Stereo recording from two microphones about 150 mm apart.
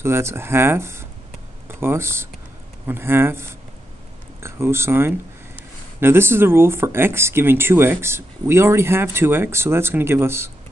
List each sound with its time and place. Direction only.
0.0 s speech: 15° right (ahead or behind)